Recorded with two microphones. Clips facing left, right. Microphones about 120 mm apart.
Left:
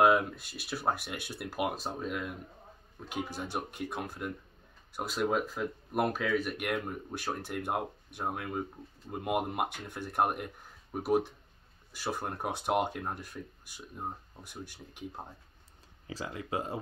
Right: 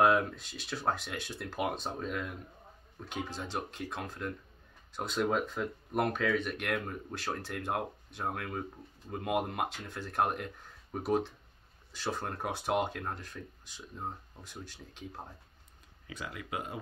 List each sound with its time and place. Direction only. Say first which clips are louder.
0.0 s speech: left 1 dB; 10° left (ahead or behind)
16.1 s speech: left 4 dB; 30° left (ahead or behind)